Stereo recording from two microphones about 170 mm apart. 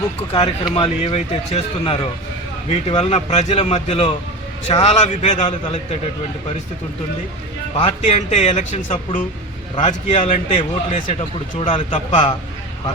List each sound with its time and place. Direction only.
0.3 s a man's voice: 30° left (ahead or behind)
7.8 s a man's voice: 35° left (ahead or behind)